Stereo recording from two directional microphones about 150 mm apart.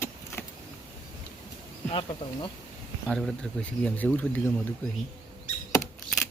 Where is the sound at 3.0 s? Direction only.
5° left (ahead or behind).